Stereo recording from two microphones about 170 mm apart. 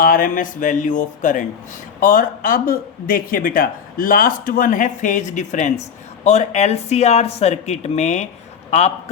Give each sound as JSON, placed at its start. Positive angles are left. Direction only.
{"t": 0.0, "sound": "speech", "side_deg": 55}